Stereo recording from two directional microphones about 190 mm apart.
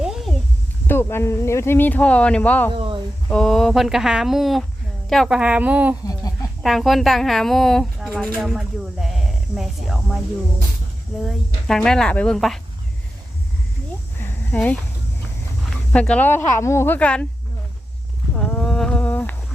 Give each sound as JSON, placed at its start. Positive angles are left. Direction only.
{"t": 0.0, "sound": "a sound", "side_deg": 0}
{"t": 0.9, "sound": "speech", "side_deg": 10}
{"t": 2.7, "sound": "a sound", "side_deg": -25}
{"t": 3.2, "sound": "a woman's voice", "side_deg": 5}
{"t": 8.4, "sound": "snake", "side_deg": 0}
{"t": 11.2, "sound": "a woman's voice", "side_deg": 0}
{"t": 14.2, "sound": "a sound", "side_deg": 5}
{"t": 15.9, "sound": "speech", "side_deg": 5}
{"t": 18.3, "sound": "humming", "side_deg": 5}